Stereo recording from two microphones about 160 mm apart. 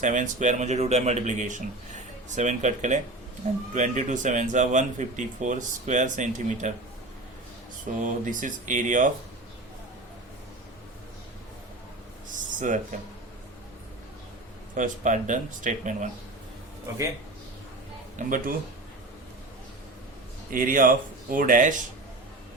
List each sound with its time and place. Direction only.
0.0 s speech: 50° right (ahead or behind)
8.0 s speech: 55° right (ahead or behind)
12.3 s a sound: 50° right (ahead or behind)
14.8 s speech: 50° right (ahead or behind)
18.2 s speech: 55° right (ahead or behind)
20.5 s speech: 60° right (ahead or behind)